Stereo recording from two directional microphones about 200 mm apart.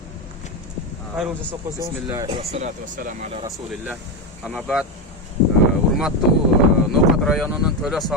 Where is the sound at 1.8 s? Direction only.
15° right (ahead or behind); by 3.2 s 40° right (ahead or behind).